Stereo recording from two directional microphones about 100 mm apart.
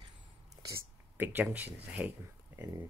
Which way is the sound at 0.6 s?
25° right (ahead or behind).